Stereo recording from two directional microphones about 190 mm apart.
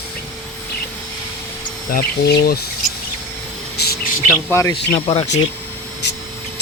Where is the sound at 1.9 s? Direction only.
55° left (ahead or behind).